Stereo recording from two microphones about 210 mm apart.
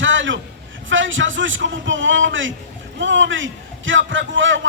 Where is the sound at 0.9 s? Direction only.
65° right (ahead or behind).